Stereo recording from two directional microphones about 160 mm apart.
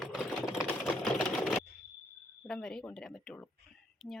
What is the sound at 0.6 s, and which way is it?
Typewriter, 5° left (ahead or behind).